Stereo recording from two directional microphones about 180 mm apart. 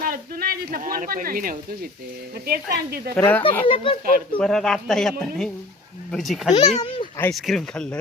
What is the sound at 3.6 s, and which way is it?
Speech, 30° left (ahead or behind).